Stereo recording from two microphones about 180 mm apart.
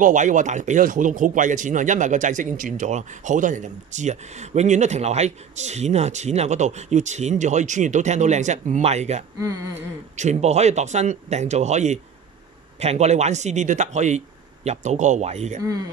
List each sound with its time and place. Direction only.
0.0 s speech: 45° right (ahead or behind)